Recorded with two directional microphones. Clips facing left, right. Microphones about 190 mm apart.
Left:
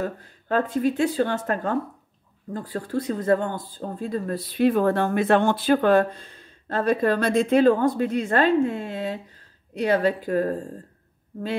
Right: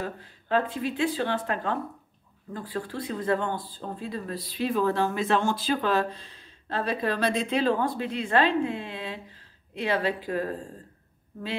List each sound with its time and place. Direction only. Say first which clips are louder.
0.0 s speech: left 5 dB; 45° left (ahead or behind)